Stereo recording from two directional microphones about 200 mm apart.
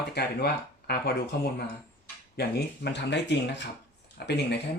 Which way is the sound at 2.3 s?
55° left (ahead or behind).